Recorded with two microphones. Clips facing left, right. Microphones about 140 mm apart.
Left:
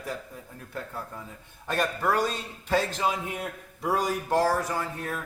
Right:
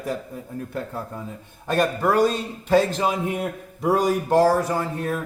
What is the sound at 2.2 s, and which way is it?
A man's voice, 65° right (ahead or behind).